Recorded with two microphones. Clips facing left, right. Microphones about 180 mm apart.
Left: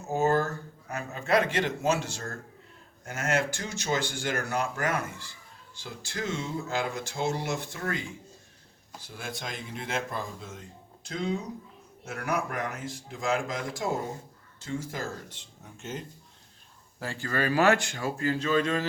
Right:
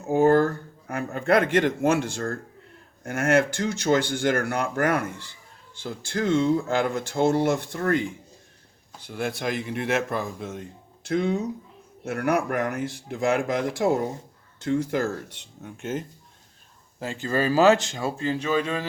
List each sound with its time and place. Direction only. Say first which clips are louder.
0.0 s speech: right 7 dB; 60° right (ahead or behind)
17.0 s speech: right 5 dB; 20° right (ahead or behind)